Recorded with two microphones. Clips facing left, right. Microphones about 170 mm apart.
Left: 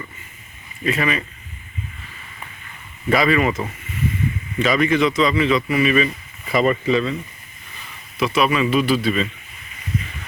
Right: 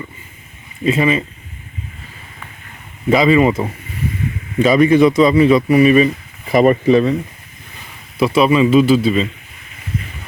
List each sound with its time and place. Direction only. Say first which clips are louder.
0.9 s a man's voice: right 6 dB; 25° right (ahead or behind)
3.1 s a man's voice: right 6 dB; 20° right (ahead or behind)
6.5 s speech: right 7 dB; 50° right (ahead or behind)
8.2 s a man's voice: right 6 dB; 30° right (ahead or behind)